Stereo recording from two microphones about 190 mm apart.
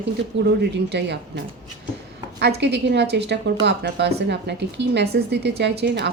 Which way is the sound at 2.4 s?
60° right (ahead or behind).